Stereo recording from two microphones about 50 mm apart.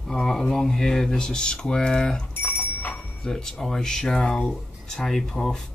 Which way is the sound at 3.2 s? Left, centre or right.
Centre.